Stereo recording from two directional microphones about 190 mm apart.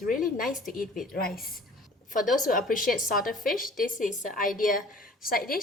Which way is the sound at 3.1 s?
45° left (ahead or behind).